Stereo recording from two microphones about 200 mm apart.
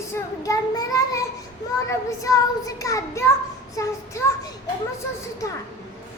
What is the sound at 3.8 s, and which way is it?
Child singing, 15° left (ahead or behind).